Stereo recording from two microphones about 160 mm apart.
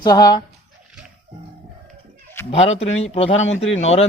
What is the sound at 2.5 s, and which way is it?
Speech, 40° left (ahead or behind).